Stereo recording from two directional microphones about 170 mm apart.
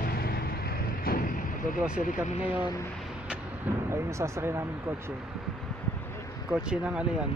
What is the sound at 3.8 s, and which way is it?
Speech, 15° right (ahead or behind).